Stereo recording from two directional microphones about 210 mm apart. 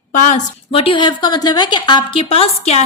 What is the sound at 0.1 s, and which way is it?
A woman's voice, 35° left (ahead or behind).